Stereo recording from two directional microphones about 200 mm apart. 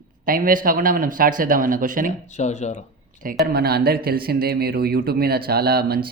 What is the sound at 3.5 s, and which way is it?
Speech, 50° right (ahead or behind).